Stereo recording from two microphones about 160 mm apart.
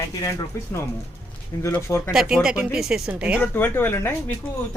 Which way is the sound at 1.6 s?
15° left (ahead or behind).